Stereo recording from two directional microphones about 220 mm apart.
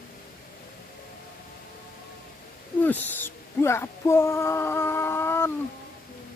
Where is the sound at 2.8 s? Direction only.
10° left (ahead or behind).